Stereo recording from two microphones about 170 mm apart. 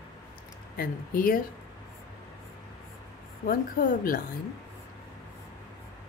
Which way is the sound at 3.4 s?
55° left (ahead or behind).